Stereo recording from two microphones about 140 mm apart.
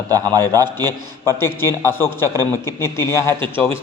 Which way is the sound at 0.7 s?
15° left (ahead or behind).